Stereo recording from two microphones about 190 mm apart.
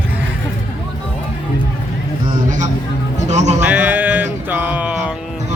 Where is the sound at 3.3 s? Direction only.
40° right (ahead or behind).